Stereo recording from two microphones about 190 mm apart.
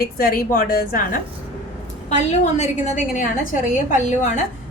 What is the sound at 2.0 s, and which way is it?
A woman's voice, 35° left (ahead or behind).